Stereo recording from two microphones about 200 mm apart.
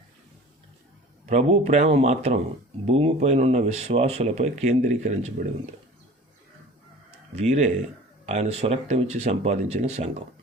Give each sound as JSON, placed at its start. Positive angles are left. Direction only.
{"t": 1.3, "sound": "speech", "side_deg": -30}
{"t": 7.3, "sound": "speech", "side_deg": -35}